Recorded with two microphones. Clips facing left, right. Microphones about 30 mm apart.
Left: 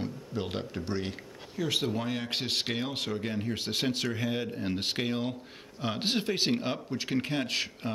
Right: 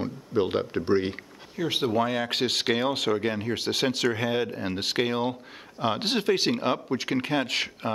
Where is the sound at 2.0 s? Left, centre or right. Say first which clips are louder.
Right 7 dB; right.